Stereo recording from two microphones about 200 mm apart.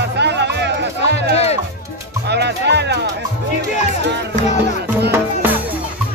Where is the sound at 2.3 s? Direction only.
55° right (ahead or behind).